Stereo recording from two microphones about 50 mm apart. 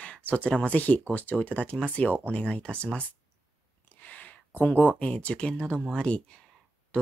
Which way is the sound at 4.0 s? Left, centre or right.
Left.